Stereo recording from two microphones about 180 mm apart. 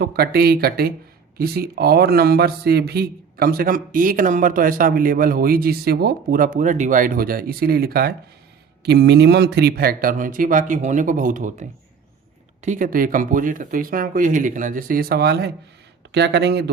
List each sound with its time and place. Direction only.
0.0 s a man's voice: 60° right (ahead or behind)
12.6 s speech: 45° right (ahead or behind); by 16.7 s 70° right (ahead or behind)